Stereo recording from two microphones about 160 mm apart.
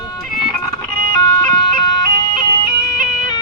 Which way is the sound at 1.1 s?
20° left (ahead or behind).